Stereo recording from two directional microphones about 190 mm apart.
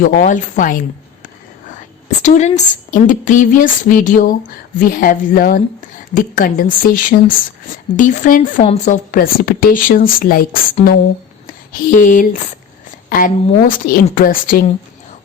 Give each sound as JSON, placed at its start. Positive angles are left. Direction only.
{"t": 0.0, "sound": "a woman's voice", "side_deg": 45}